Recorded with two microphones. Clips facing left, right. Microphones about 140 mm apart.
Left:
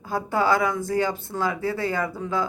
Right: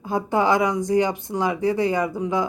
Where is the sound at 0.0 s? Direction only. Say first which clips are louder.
Right 3 dB; 20° right (ahead or behind).